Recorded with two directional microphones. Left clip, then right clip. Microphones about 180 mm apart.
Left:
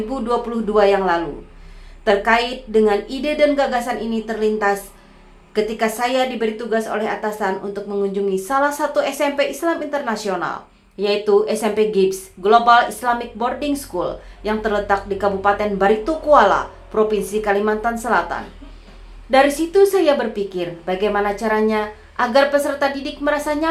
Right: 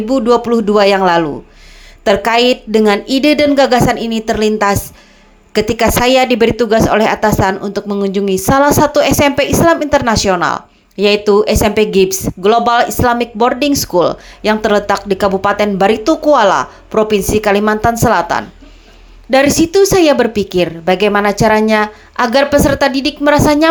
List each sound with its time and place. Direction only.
0.1 s a woman's voice: 35° right (ahead or behind)